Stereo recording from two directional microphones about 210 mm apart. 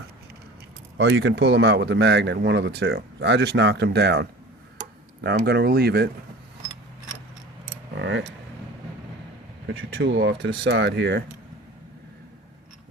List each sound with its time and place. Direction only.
0.9 s speech: 55° right (ahead or behind)
9.6 s speech: 55° right (ahead or behind)